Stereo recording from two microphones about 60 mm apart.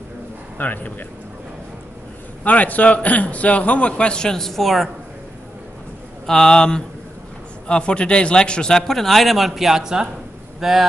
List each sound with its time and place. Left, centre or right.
0.6 s speech: left
2.4 s a man's voice: left; by 4.8 s centre
6.2 s speech: centre